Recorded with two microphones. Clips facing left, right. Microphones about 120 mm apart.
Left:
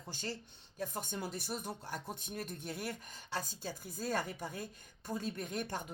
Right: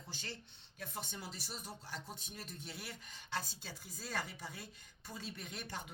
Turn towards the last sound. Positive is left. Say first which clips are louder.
# left 7 dB
turn(degrees=45)  # may be behind; listen again after turning